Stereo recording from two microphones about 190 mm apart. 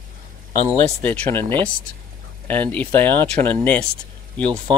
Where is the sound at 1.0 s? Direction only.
10° left (ahead or behind).